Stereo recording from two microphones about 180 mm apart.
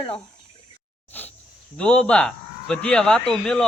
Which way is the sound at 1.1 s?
10° left (ahead or behind).